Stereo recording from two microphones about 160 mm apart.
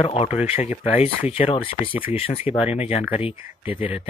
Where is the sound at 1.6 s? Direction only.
10° right (ahead or behind).